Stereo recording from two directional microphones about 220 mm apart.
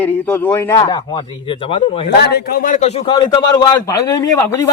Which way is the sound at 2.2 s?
45° left (ahead or behind).